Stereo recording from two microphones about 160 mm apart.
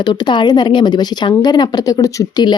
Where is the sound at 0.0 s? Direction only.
30° left (ahead or behind).